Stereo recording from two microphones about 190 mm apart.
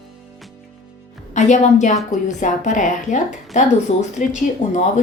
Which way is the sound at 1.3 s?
40° left (ahead or behind).